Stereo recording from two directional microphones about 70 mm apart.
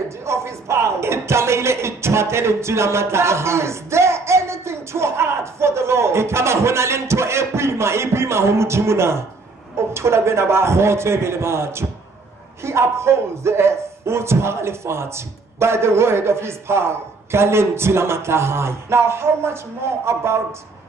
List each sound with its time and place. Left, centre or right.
0.2 s music: right
9.9 s speech: right